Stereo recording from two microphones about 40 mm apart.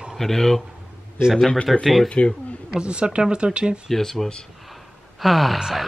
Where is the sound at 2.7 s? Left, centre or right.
Right.